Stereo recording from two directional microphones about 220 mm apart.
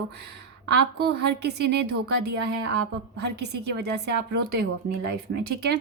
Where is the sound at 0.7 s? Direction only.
50° right (ahead or behind).